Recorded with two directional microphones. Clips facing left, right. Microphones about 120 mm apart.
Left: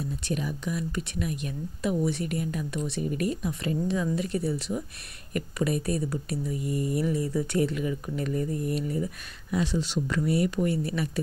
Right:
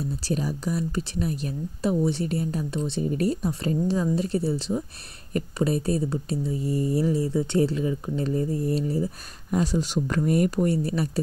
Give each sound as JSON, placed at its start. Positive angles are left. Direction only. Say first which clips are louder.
{"t": 0.2, "sound": "speech", "louder": "right 4 dB", "side_deg": -35}